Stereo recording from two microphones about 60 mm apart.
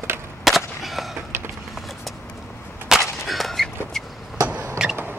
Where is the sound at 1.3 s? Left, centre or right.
Right.